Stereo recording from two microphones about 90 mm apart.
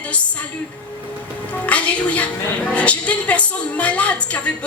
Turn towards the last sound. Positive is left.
turn(degrees=15)  # may be behind; listen again after turning